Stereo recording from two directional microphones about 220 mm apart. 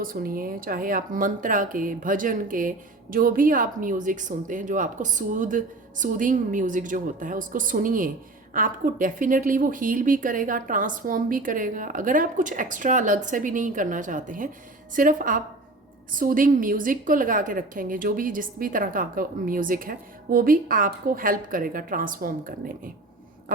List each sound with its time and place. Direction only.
0.0 s speech: 40° right (ahead or behind)